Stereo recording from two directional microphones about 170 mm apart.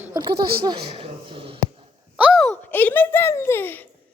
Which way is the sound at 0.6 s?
30° right (ahead or behind).